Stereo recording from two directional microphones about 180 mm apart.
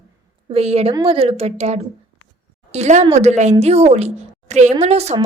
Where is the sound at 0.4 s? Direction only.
35° right (ahead or behind).